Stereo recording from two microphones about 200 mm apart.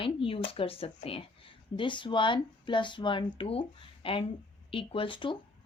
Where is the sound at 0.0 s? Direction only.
25° left (ahead or behind).